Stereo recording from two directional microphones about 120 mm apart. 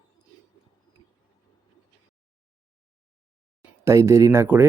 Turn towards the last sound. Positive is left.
turn(degrees=-20)  # may be behind; listen again after turning